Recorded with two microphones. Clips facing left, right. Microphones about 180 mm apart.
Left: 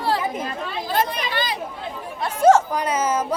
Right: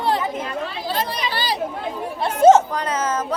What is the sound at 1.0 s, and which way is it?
Chatter, 35° right (ahead or behind).